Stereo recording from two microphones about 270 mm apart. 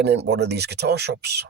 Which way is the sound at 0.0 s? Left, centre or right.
Right.